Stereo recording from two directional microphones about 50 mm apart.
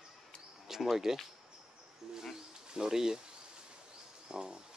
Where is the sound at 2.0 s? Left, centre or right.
Centre.